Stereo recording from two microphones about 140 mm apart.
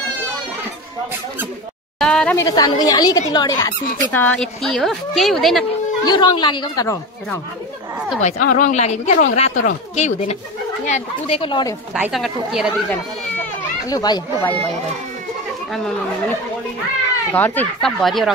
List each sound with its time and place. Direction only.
2.0 s a sound: 5° left (ahead or behind)
2.3 s speech: 25° left (ahead or behind)
4.1 s speech: 10° left (ahead or behind)
6.0 s a woman's voice: 30° left (ahead or behind)
8.2 s a woman's voice: 60° left (ahead or behind); by 11.7 s 35° left (ahead or behind)
12.1 s speech: 5° right (ahead or behind)
13.8 s speech: 30° left (ahead or behind)
14.4 s speech: 10° left (ahead or behind)
17.3 s speech: 10° left (ahead or behind)
18.0 s speech: centre (ahead or behind)